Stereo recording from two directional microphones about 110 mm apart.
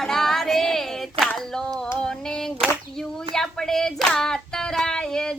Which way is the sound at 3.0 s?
5° left (ahead or behind).